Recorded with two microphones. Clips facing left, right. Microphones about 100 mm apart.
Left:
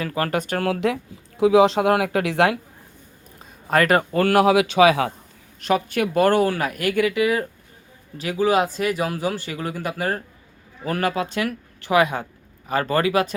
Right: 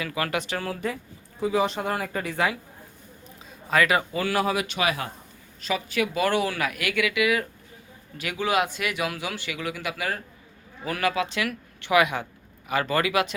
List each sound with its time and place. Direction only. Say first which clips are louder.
0.0 s speech: left 4 dB; 40° left (ahead or behind)
0.6 s speech: left 8 dB; 90° left
3.7 s a man's voice: left 4 dB; 50° left (ahead or behind); by 5.1 s 90° left
5.5 s speech: left 5 dB; 55° left (ahead or behind); by 13.3 s 35° left (ahead or behind)